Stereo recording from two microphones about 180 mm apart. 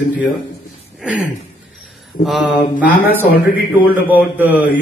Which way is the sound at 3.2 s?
60° left (ahead or behind).